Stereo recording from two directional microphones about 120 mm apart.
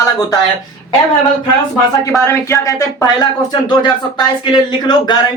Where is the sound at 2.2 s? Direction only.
25° left (ahead or behind).